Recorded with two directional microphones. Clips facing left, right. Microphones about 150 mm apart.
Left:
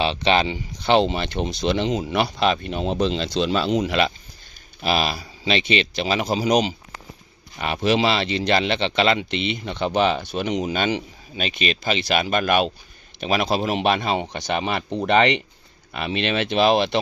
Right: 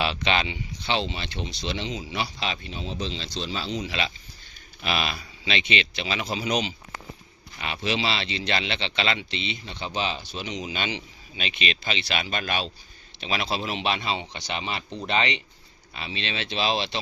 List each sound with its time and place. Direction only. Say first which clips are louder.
0.0 s speech: left 6 dB; 30° left (ahead or behind)
0.9 s speech: left 10 dB; 50° left (ahead or behind)
4.8 s speech: left 6 dB; 40° left (ahead or behind); by 17.0 s 55° left (ahead or behind)